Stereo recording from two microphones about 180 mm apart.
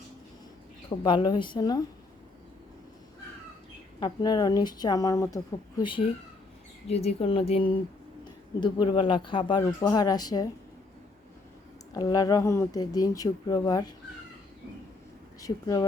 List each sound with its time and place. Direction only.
0.9 s a woman's voice: 25° left (ahead or behind)
4.0 s a woman's voice: 25° left (ahead or behind)
11.9 s a woman's voice: 20° left (ahead or behind)
15.4 s a woman's voice: 20° left (ahead or behind)